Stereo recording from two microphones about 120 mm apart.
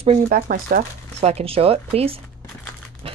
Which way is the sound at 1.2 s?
65° right (ahead or behind).